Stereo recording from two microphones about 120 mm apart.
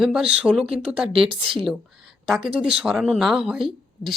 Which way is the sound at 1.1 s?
50° right (ahead or behind).